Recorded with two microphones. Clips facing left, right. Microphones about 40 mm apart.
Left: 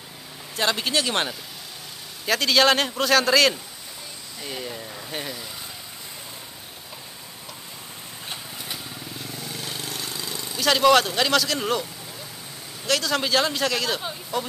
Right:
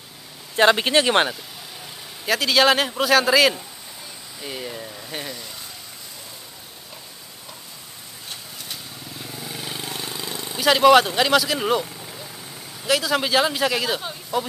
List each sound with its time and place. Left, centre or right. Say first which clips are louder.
0.6 s speech: right 7 dB; right
2.2 s speech: right 1 dB; centre
8.3 s vehicle: left 1 dB; centre
9.2 s vehicle: right 3 dB; centre
12.8 s speech: right 3 dB; centre